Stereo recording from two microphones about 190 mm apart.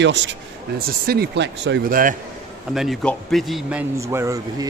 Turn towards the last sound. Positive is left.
turn(degrees=-15)  # may be behind; listen again after turning